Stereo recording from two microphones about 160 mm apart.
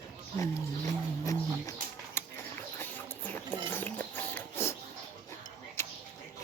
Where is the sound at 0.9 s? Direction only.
20° left (ahead or behind).